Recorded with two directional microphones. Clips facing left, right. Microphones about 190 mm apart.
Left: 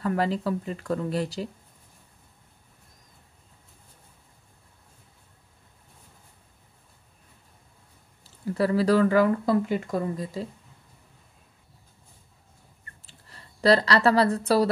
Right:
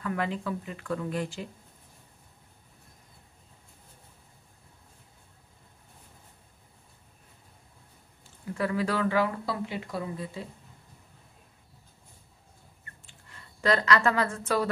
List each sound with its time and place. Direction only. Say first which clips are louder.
0.0 s speech: left 5 dB; 35° left (ahead or behind)
8.2 s speech: left 6 dB; 35° left (ahead or behind)
13.0 s a woman's voice: left 3 dB; 35° left (ahead or behind)